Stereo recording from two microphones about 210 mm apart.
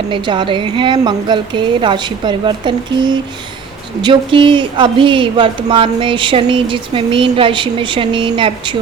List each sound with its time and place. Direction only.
0.1 s speech: 20° right (ahead or behind)